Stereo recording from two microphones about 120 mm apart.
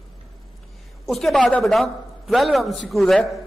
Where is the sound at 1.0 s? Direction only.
Centre (ahead or behind).